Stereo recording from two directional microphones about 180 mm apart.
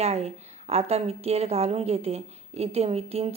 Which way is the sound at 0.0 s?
35° right (ahead or behind).